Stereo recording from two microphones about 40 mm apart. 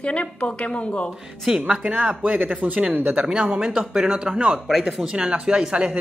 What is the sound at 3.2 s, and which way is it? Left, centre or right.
Speech, right.